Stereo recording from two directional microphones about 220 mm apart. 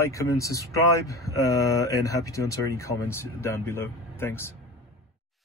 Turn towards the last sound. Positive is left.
turn(degrees=10)  # may be behind; listen again after turning